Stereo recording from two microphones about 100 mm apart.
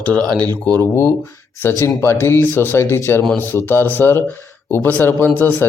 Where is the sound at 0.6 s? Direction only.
25° left (ahead or behind).